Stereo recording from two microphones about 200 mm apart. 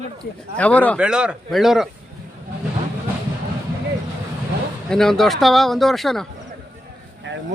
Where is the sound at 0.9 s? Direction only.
5° right (ahead or behind).